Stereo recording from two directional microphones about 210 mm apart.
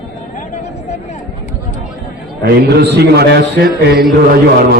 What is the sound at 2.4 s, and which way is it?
A man's voice, 50° right (ahead or behind).